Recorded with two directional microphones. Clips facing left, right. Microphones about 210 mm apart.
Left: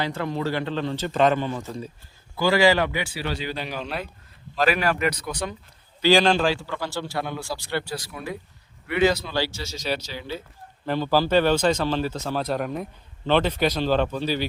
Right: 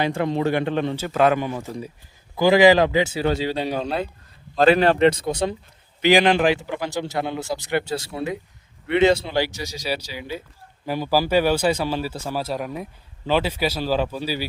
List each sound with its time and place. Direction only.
0.0 s a man's voice: 20° right (ahead or behind)
1.0 s a man's voice: 5° right (ahead or behind)